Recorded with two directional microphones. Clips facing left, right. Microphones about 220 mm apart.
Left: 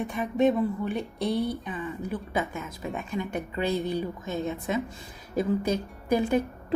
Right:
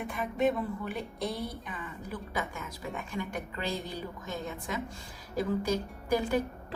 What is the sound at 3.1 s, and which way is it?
A woman's voice, 20° left (ahead or behind).